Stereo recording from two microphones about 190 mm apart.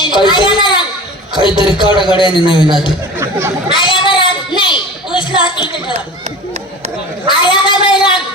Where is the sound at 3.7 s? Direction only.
25° left (ahead or behind).